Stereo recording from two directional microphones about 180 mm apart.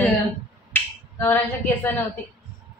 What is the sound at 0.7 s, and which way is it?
Speech, 10° left (ahead or behind).